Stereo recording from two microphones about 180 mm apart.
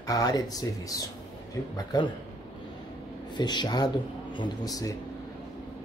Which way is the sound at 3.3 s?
25° left (ahead or behind).